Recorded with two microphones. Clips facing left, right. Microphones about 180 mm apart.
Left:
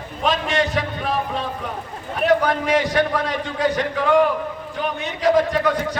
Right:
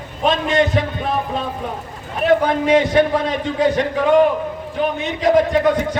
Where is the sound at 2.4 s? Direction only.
25° right (ahead or behind).